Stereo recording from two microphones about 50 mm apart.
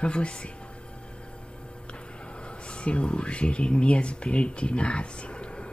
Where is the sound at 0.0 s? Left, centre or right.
Left.